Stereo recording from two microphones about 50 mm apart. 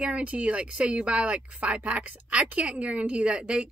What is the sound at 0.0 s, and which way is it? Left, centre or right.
Speech, right.